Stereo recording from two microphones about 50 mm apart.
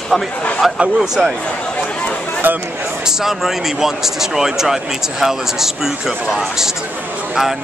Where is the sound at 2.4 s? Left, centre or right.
Right.